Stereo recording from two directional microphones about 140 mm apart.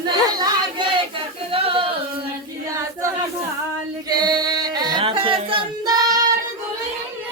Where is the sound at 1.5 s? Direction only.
40° right (ahead or behind).